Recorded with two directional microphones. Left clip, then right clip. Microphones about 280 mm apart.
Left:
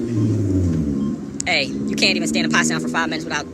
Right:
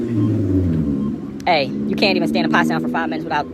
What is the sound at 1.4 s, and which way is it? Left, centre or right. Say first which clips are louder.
Speech: right 3 dB; centre.